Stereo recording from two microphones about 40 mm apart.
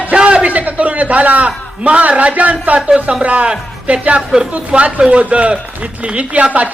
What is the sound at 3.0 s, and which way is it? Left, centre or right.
Speech, right.